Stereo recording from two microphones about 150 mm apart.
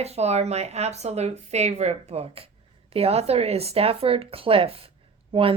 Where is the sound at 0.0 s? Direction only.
45° right (ahead or behind).